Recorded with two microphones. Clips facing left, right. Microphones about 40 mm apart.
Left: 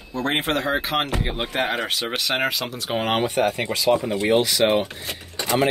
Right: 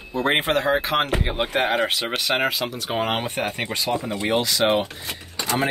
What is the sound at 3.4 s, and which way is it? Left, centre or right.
Speech, right.